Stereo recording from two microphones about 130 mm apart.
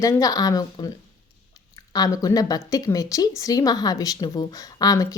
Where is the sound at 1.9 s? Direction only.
30° left (ahead or behind).